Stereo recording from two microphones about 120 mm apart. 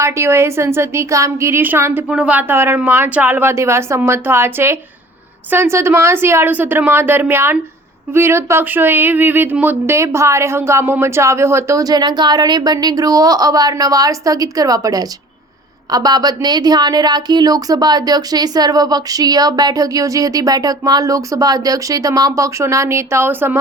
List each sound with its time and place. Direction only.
0.0 s speech: 20° right (ahead or behind)